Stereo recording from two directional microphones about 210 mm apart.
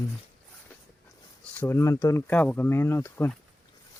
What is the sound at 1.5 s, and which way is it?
Speech, 10° left (ahead or behind).